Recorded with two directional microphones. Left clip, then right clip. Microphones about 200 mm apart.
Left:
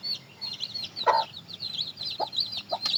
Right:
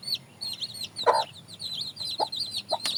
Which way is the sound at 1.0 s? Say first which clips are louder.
Even; 60° right (ahead or behind).